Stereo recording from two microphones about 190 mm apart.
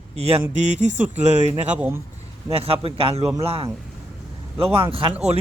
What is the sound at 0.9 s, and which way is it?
Speech, 10° right (ahead or behind).